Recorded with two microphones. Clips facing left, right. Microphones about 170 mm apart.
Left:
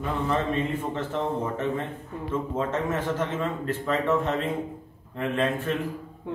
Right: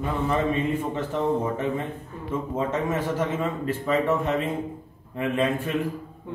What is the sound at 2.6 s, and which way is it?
Speech, 10° right (ahead or behind).